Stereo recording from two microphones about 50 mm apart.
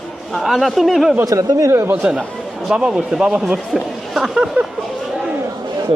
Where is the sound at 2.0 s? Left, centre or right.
Centre.